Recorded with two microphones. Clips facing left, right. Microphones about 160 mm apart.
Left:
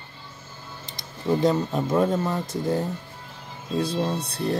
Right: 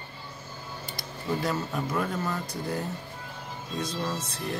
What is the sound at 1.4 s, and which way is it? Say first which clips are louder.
Speech: left 7 dB; 25° left (ahead or behind).